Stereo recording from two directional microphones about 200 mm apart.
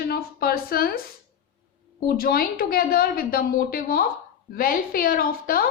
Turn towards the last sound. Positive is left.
turn(degrees=45)  # may be behind; listen again after turning